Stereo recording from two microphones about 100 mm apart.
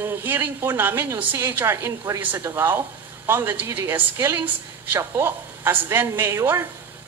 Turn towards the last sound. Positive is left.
turn(degrees=-25)  # may be behind; listen again after turning